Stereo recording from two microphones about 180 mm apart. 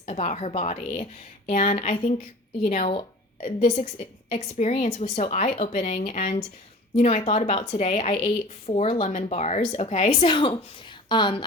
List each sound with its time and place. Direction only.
0.0 s a woman's voice: 35° left (ahead or behind)